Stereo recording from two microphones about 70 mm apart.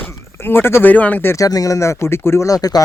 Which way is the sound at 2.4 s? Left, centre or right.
Left.